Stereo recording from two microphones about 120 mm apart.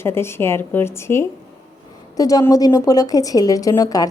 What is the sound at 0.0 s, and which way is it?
A woman's voice, 20° left (ahead or behind).